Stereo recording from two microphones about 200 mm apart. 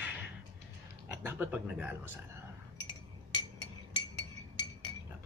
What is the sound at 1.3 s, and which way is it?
Speech, 10° right (ahead or behind).